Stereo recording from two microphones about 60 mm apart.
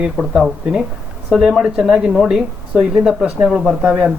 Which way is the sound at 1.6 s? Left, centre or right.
Centre.